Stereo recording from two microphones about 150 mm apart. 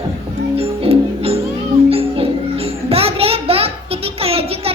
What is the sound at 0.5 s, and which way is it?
Music, 40° right (ahead or behind).